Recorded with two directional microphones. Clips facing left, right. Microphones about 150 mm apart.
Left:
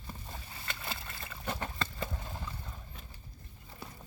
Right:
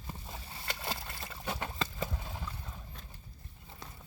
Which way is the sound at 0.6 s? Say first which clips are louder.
Right 3 dB; 35° right (ahead or behind).